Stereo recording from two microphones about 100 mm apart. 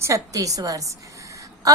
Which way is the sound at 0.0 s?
35° right (ahead or behind).